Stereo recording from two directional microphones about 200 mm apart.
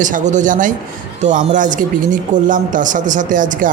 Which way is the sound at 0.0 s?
40° right (ahead or behind).